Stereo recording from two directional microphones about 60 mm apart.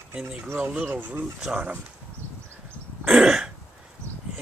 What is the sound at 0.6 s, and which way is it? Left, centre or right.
Speech, right.